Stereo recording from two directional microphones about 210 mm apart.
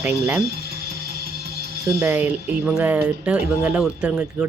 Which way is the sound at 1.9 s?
10° right (ahead or behind).